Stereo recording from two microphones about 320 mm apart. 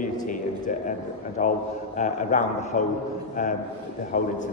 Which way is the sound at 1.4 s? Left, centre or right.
Left.